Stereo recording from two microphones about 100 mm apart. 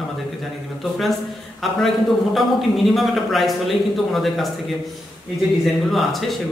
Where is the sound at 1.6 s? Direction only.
Centre (ahead or behind).